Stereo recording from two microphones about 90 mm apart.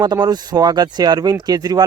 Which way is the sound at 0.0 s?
55° right (ahead or behind).